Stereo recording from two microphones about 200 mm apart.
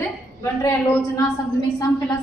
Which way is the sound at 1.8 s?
15° left (ahead or behind).